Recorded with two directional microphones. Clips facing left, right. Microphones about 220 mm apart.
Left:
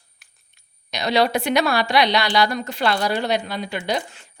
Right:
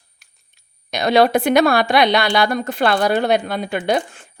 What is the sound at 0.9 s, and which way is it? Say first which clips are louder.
A woman's voice: right 5 dB; 50° right (ahead or behind).